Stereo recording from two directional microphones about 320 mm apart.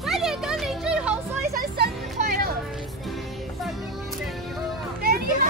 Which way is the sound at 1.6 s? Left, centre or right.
Right.